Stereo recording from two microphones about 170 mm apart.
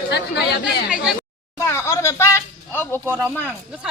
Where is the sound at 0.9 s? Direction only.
5° right (ahead or behind).